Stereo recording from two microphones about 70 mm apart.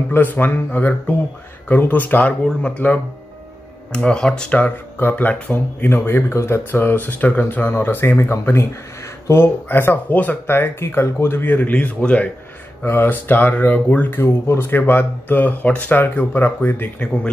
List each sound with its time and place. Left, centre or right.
0.1 s speech: left; by 4.5 s centre
4.5 s speech: left
6.7 s speech: left
12.8 s speech: left